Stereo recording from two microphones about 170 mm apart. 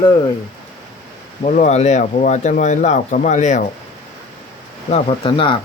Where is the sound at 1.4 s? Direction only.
40° left (ahead or behind).